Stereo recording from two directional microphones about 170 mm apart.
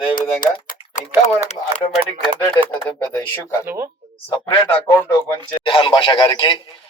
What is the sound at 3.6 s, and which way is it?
Speech, 15° right (ahead or behind).